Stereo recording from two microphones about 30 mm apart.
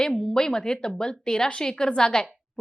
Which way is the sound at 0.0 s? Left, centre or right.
Left.